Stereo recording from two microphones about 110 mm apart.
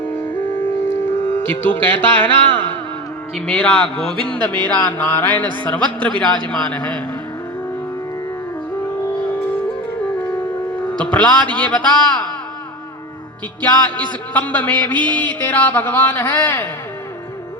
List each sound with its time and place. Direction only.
0.0 s music: 20° left (ahead or behind)
10.9 s music: 10° left (ahead or behind)
13.6 s music: 15° left (ahead or behind)